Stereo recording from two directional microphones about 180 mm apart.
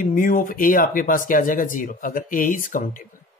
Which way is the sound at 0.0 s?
50° left (ahead or behind).